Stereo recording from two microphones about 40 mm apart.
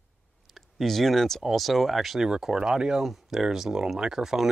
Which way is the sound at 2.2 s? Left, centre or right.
Centre.